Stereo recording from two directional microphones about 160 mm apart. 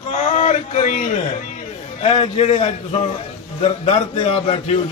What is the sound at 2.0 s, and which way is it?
A man's voice, 45° left (ahead or behind).